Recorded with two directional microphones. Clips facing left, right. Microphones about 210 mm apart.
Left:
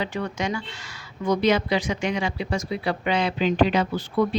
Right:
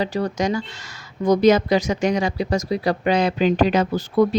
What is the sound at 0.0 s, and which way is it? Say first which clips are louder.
Speech: right 5 dB; 40° right (ahead or behind).